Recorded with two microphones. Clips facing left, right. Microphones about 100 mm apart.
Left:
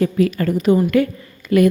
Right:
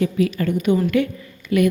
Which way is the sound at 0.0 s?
45° left (ahead or behind).